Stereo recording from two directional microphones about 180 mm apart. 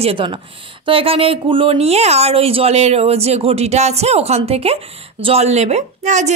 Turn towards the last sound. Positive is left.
turn(degrees=-40)  # may be behind; listen again after turning